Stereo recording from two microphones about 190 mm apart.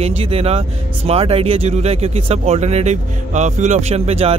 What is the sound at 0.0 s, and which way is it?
Speech, 30° right (ahead or behind).